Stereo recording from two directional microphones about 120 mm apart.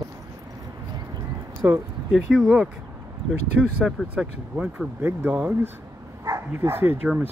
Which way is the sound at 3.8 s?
10° right (ahead or behind).